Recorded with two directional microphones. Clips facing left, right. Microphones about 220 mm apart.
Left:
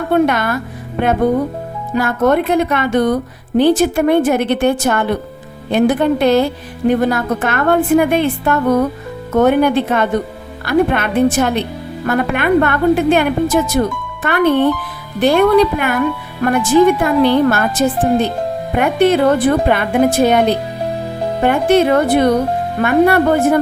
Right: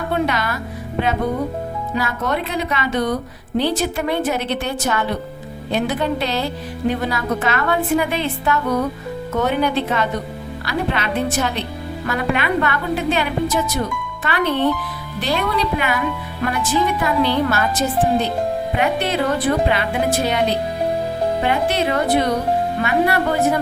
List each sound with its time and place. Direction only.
0.1 s a woman's voice: 50° left (ahead or behind)
21.4 s a woman's voice: 50° left (ahead or behind)